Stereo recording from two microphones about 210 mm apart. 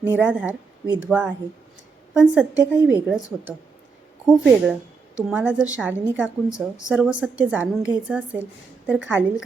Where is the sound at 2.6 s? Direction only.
15° right (ahead or behind).